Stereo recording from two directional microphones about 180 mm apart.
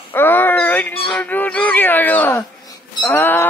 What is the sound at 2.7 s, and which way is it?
Music, 15° left (ahead or behind).